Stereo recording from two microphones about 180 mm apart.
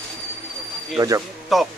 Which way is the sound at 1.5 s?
Centre (ahead or behind).